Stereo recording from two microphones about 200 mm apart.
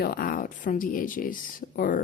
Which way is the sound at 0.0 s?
50° left (ahead or behind).